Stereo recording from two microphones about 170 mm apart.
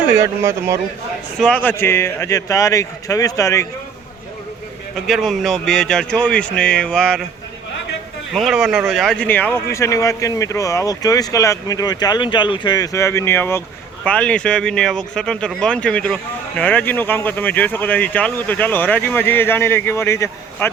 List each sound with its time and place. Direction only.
1.4 s speech: 5° left (ahead or behind)
5.0 s speech: centre (ahead or behind)
8.3 s speech: centre (ahead or behind); by 20.7 s 15° left (ahead or behind)